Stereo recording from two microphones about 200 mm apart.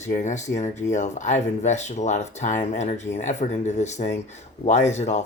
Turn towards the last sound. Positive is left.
turn(degrees=35)  # may be behind; listen again after turning